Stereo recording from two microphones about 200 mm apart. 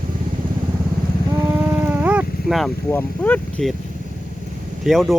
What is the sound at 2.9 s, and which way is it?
Speech, 10° left (ahead or behind).